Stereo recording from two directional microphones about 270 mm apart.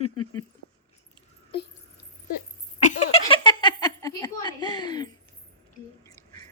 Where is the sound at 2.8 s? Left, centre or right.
Left.